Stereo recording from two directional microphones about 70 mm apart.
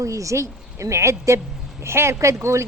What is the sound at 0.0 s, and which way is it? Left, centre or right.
A woman's voice, right.